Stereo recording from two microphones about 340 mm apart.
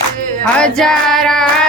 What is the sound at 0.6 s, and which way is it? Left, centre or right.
Child singing, centre.